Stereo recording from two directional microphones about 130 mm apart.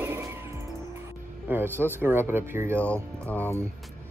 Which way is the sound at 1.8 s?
15° right (ahead or behind).